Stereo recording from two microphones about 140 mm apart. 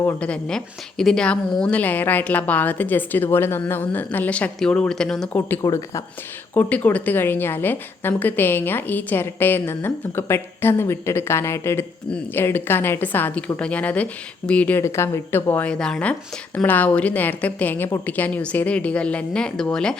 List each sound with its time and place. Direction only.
0.0 s speech: 10° left (ahead or behind)
5.6 s speech: 20° left (ahead or behind); by 20.0 s 5° left (ahead or behind)